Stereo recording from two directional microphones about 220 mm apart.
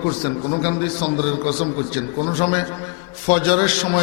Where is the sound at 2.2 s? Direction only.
25° left (ahead or behind).